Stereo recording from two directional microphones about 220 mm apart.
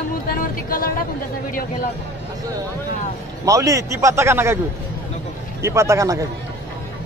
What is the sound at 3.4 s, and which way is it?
A man's voice, 15° right (ahead or behind).